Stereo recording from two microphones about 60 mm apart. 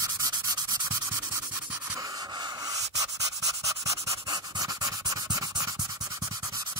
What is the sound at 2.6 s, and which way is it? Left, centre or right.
Pant, right.